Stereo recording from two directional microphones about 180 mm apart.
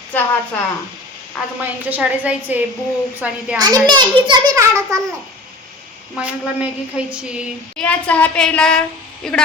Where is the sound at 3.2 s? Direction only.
5° right (ahead or behind).